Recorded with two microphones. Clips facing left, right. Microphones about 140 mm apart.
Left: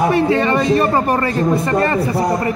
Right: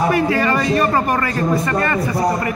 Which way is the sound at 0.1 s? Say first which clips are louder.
Left 2 dB; 25° left (ahead or behind).